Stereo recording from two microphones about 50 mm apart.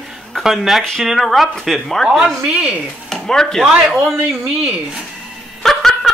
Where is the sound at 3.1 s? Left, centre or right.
Centre.